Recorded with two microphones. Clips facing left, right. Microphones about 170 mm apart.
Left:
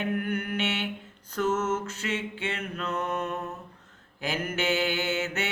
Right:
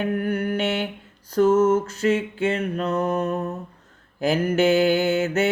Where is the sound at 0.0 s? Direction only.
35° right (ahead or behind).